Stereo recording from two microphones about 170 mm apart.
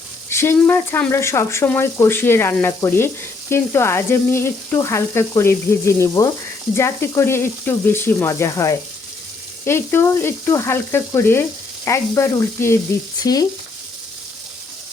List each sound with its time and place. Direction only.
0.3 s frying: 15° left (ahead or behind)